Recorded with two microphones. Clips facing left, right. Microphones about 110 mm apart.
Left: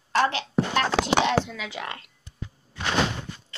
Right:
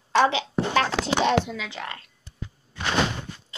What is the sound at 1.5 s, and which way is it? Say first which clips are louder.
Speech: right 1 dB; 5° left (ahead or behind).